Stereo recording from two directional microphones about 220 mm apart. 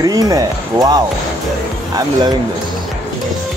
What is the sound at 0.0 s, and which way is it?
Speech, 15° right (ahead or behind).